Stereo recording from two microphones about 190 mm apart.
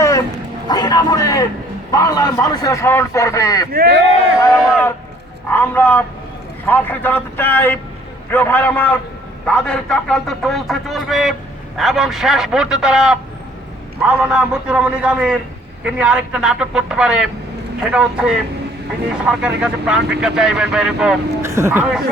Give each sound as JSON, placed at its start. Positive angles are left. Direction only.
{"t": 0.7, "sound": "a man's voice", "side_deg": 20}
{"t": 3.7, "sound": "speech", "side_deg": -55}
{"t": 4.4, "sound": "a man's voice", "side_deg": 15}